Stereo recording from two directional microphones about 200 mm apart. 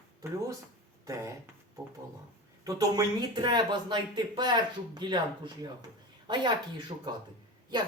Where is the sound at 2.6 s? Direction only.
15° right (ahead or behind).